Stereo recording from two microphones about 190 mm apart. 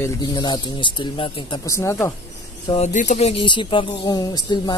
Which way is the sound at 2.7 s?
40° left (ahead or behind).